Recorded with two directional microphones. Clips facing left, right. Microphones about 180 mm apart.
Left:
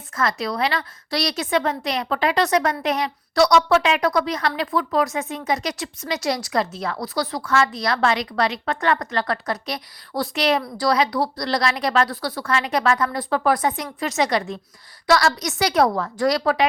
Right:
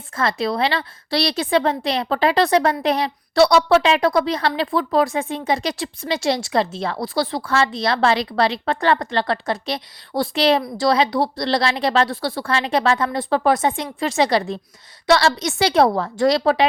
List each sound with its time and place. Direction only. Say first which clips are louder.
0.2 s a woman's voice: right 3 dB; 30° right (ahead or behind)